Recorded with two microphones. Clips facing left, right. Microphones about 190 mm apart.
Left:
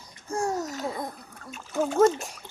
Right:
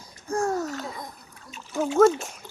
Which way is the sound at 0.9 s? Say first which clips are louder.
Left 5 dB; 60° left (ahead or behind).